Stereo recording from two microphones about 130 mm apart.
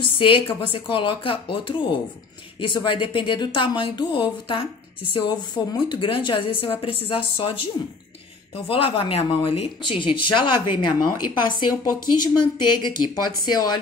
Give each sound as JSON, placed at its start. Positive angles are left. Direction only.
{"t": 0.0, "sound": "a woman's voice", "side_deg": 40}
{"t": 8.6, "sound": "a woman's voice", "side_deg": 45}